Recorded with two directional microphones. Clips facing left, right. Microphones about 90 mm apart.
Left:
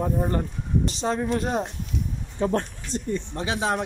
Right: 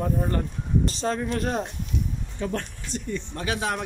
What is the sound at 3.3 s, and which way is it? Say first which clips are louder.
Speech: left 1 dB; 25° left (ahead or behind).